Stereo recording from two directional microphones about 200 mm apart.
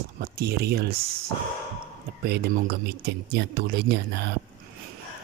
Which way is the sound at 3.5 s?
50° right (ahead or behind).